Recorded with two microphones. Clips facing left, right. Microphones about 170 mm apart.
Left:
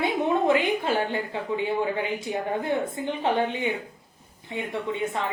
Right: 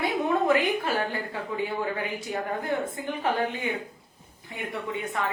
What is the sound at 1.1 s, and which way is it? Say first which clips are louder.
A woman's voice: left 3 dB; 20° left (ahead or behind).